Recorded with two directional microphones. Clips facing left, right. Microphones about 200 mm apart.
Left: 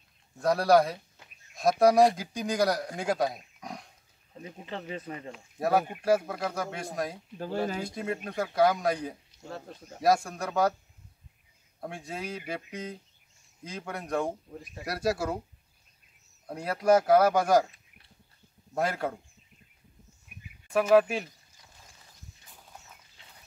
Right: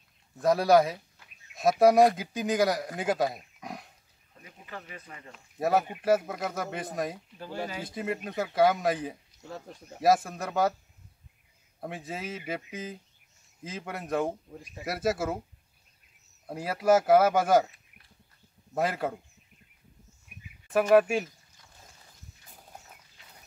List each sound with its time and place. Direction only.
0.4 s speech: centre (ahead or behind)
4.4 s speech: 25° left (ahead or behind)
5.6 s speech: centre (ahead or behind)
9.5 s speech: 15° right (ahead or behind)
9.9 s speech: 5° right (ahead or behind)
11.8 s speech: centre (ahead or behind)
16.4 s speech: 5° right (ahead or behind)
18.8 s speech: centre (ahead or behind)
20.7 s speech: centre (ahead or behind)